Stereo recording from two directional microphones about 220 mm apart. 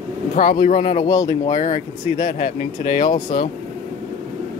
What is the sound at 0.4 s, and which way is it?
Speech, 40° left (ahead or behind).